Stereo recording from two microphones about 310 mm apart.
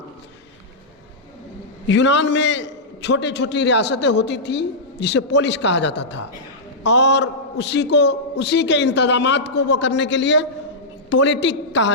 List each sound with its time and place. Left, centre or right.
1.9 s a man's voice: left